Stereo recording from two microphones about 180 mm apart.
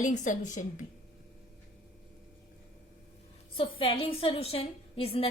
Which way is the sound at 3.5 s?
30° left (ahead or behind).